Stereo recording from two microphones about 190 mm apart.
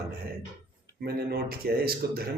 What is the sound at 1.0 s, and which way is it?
Mantra, 55° right (ahead or behind).